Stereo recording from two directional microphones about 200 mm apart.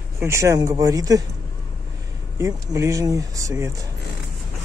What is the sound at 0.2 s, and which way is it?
Speech, 15° right (ahead or behind).